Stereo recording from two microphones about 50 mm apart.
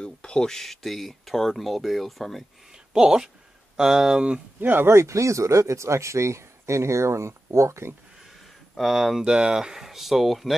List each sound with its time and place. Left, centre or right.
0.0 s speech: centre
2.9 s speech: centre
4.6 s speech: right
4.8 s speech: right
8.7 s speech: centre
9.2 s speech: centre